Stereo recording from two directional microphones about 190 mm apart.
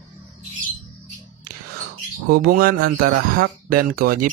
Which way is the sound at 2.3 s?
50° right (ahead or behind).